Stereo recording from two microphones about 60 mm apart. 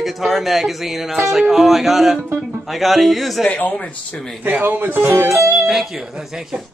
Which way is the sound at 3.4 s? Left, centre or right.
Left.